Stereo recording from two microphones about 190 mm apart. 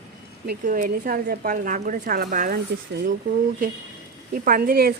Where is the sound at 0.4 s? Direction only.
45° right (ahead or behind).